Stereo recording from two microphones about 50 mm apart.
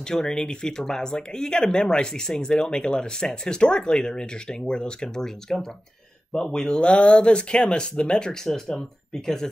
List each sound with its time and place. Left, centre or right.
0.0 s speech: centre